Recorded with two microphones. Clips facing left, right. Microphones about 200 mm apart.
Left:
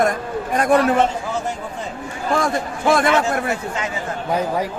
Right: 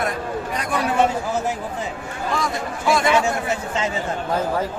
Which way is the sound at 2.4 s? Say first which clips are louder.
Left 4 dB; 55° left (ahead or behind).